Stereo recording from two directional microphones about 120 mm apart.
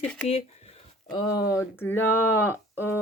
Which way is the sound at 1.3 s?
25° left (ahead or behind).